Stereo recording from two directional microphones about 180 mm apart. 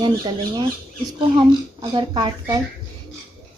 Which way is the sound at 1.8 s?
25° right (ahead or behind).